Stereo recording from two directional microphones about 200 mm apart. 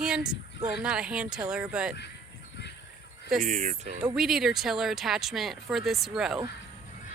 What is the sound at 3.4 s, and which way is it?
Speech, 40° right (ahead or behind).